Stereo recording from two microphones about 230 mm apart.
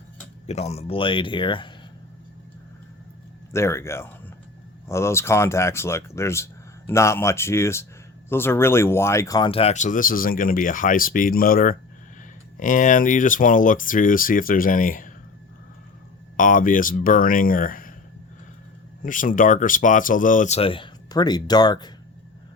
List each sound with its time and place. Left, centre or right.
0.4 s speech: left
3.5 s speech: centre; by 15.1 s left
16.4 s speech: left
19.0 s speech: left; by 21.9 s centre